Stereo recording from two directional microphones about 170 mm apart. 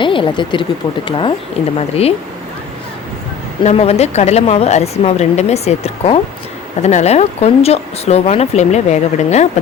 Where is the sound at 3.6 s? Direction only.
35° left (ahead or behind).